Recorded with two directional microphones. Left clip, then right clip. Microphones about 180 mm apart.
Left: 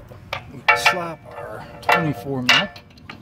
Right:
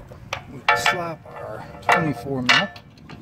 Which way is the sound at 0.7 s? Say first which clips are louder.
Left 2 dB; 5° right (ahead or behind).